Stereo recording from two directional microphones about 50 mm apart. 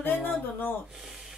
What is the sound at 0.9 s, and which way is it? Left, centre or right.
Speech, centre.